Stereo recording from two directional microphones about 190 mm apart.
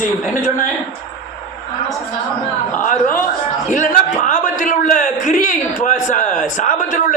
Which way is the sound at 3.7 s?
40° left (ahead or behind).